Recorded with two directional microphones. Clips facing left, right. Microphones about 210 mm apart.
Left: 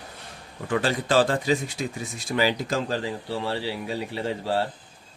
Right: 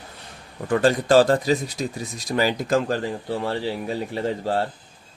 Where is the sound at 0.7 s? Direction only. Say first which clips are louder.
Right 6 dB; 45° right (ahead or behind).